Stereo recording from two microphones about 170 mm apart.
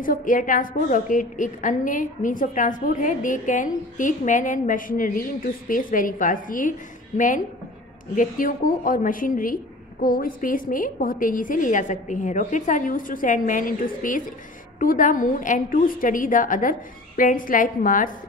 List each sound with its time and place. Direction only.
0.0 s a woman's voice: 55° left (ahead or behind)